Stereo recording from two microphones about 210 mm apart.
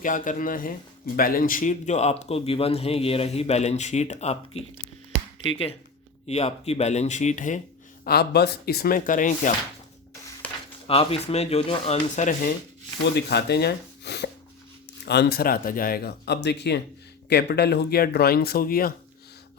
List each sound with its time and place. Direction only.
0.0 s speech: 40° left (ahead or behind)
6.2 s speech: 30° left (ahead or behind)
8.0 s speech: 50° left (ahead or behind)
10.4 s a sound: 5° left (ahead or behind)
10.8 s speech: 25° left (ahead or behind)
13.0 s speech: 55° left (ahead or behind)